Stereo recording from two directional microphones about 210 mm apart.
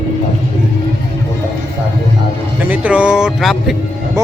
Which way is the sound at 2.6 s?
5° right (ahead or behind).